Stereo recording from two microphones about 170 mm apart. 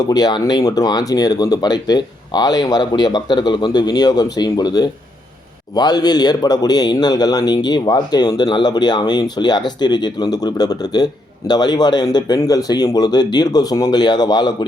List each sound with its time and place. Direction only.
0.0 s a man's voice: 25° left (ahead or behind)